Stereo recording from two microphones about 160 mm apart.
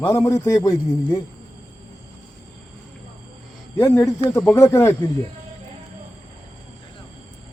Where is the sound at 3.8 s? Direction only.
15° left (ahead or behind).